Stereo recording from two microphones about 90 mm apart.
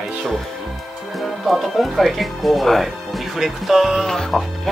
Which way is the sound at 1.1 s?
Centre (ahead or behind).